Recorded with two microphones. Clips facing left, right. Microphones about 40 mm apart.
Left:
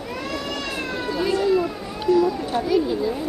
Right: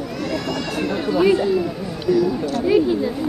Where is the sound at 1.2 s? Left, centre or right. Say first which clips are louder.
Right 5 dB; right.